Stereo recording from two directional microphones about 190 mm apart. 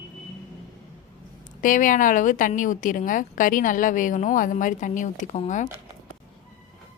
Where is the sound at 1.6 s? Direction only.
45° left (ahead or behind).